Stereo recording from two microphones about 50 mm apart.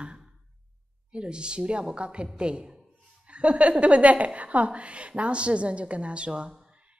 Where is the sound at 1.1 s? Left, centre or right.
Centre.